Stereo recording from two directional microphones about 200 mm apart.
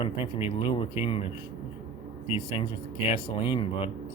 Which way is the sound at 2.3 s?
25° left (ahead or behind).